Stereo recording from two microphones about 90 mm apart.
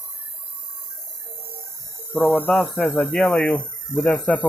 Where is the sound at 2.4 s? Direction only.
5° left (ahead or behind).